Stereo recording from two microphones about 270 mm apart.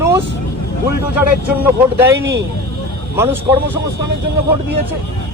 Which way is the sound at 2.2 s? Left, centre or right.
Right.